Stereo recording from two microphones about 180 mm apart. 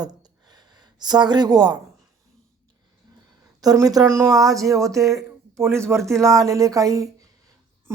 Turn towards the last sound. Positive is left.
turn(degrees=-20)  # may be behind; listen again after turning